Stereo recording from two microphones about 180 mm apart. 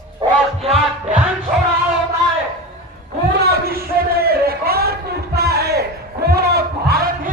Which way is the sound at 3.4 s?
60° right (ahead or behind).